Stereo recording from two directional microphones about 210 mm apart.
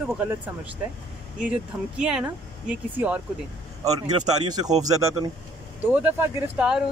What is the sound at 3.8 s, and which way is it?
A man's voice, 20° right (ahead or behind).